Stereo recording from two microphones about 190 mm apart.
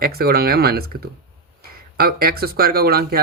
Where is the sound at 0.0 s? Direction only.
55° right (ahead or behind).